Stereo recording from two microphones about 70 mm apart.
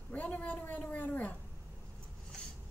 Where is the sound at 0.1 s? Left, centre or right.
Left.